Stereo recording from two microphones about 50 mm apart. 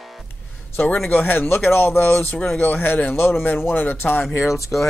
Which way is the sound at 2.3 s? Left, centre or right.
Left.